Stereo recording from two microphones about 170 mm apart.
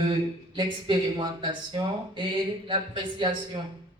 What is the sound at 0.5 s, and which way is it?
Speech, 30° right (ahead or behind).